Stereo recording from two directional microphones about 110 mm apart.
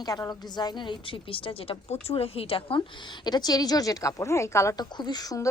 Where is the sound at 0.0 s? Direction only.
35° left (ahead or behind); by 2.8 s 55° left (ahead or behind).